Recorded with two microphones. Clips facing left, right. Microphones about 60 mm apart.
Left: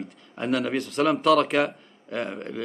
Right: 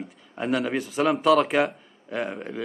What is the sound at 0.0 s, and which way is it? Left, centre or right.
A man's voice, centre.